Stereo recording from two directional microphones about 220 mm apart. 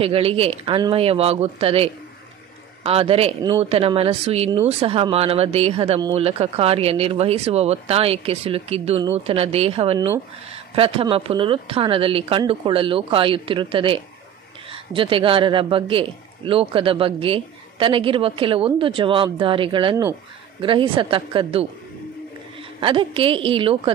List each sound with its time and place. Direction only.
0.0 s speech: 25° right (ahead or behind)
22.8 s speech: 25° right (ahead or behind)